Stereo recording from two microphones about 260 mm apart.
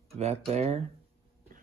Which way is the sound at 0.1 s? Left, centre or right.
Right.